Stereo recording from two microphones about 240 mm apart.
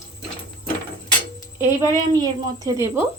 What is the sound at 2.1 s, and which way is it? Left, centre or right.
Speech, centre.